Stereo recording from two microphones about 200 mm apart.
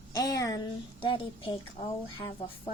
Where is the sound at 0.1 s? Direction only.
15° left (ahead or behind).